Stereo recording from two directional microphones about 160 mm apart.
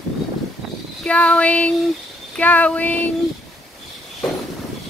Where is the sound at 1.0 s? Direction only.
5° left (ahead or behind).